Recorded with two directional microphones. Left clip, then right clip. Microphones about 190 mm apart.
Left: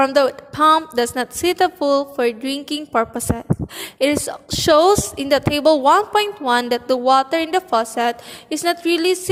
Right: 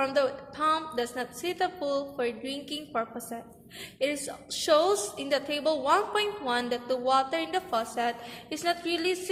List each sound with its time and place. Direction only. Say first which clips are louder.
0.0 s a woman's voice: left 11 dB; 50° left (ahead or behind)